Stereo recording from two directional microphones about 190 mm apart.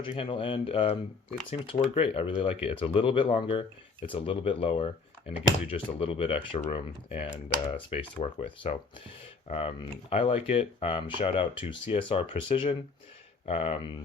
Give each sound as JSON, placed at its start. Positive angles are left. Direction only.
{"t": 0.0, "sound": "speech", "side_deg": 25}